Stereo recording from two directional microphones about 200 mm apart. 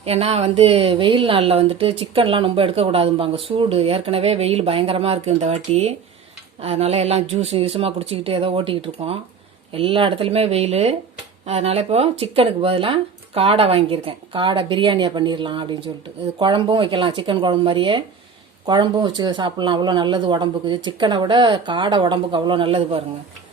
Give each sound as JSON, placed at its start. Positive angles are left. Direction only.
{"t": 0.0, "sound": "a woman's voice", "side_deg": -30}